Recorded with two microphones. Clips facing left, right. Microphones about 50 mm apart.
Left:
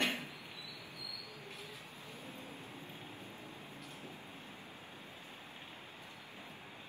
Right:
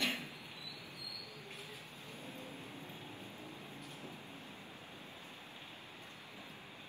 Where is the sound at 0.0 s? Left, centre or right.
Left.